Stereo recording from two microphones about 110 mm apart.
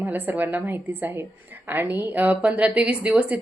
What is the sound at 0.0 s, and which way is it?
A woman's voice, 15° right (ahead or behind).